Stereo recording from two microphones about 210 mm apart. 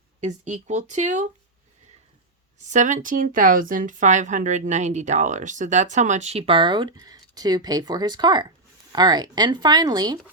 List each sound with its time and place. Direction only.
0.2 s speech: 35° right (ahead or behind)
2.6 s speech: 35° right (ahead or behind); by 10.2 s 20° right (ahead or behind)